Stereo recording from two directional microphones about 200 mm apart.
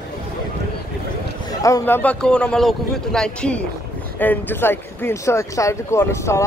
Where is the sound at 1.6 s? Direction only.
15° left (ahead or behind).